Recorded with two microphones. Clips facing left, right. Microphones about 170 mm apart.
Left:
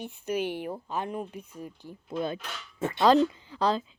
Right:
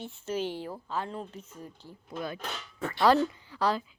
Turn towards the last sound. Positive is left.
turn(degrees=20)  # may be behind; listen again after turning